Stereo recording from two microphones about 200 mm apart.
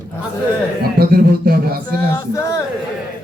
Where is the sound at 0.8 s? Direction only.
50° right (ahead or behind).